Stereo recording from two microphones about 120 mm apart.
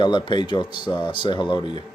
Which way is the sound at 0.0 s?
40° left (ahead or behind).